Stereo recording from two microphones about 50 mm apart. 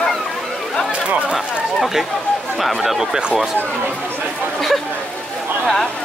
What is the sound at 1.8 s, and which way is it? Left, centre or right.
Speech, centre.